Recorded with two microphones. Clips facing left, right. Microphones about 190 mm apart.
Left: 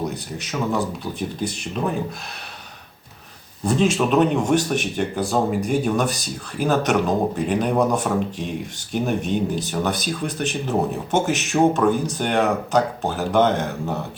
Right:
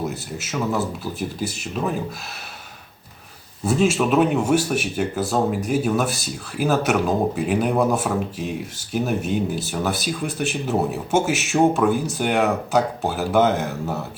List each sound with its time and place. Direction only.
0.0 s speech: 5° right (ahead or behind)
3.6 s speech: 5° right (ahead or behind)